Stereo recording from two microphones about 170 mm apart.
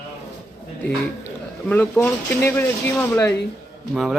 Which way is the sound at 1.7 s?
10° left (ahead or behind).